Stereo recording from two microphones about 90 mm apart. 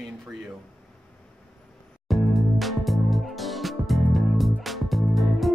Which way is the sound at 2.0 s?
Centre (ahead or behind).